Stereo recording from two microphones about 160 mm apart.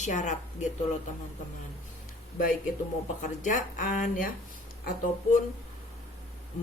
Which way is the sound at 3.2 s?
55° left (ahead or behind).